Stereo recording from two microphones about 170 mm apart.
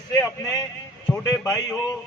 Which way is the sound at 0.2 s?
20° left (ahead or behind).